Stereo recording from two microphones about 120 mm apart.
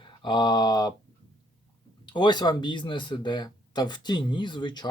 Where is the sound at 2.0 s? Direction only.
40° left (ahead or behind).